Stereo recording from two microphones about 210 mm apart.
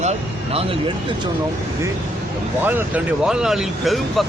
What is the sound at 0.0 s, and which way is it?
Speech, 30° right (ahead or behind).